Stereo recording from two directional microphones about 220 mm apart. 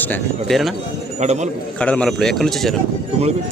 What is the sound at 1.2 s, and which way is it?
Speech, 30° right (ahead or behind).